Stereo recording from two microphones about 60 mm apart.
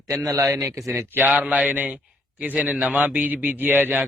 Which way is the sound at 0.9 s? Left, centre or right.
Right.